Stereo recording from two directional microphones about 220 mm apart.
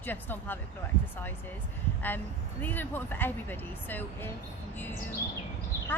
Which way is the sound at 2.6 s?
10° left (ahead or behind).